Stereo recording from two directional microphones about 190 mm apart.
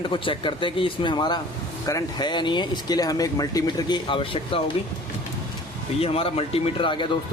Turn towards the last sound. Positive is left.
turn(degrees=25)  # may be behind; listen again after turning